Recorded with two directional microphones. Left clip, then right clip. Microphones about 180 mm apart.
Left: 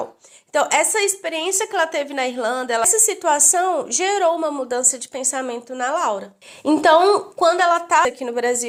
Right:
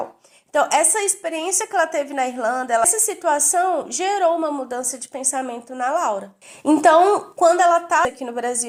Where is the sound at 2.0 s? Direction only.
40° left (ahead or behind).